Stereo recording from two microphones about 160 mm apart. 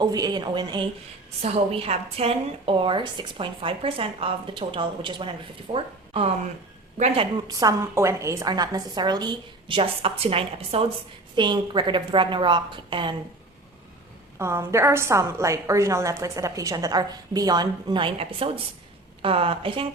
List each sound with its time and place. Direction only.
0.0 s a woman's voice: 25° right (ahead or behind)
1.4 s a woman's voice: 40° right (ahead or behind)
7.4 s a woman's voice: 20° right (ahead or behind)
14.3 s a woman's voice: 15° right (ahead or behind); by 19.9 s 35° right (ahead or behind)